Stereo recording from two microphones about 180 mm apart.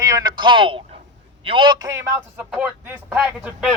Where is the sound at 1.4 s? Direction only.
25° right (ahead or behind).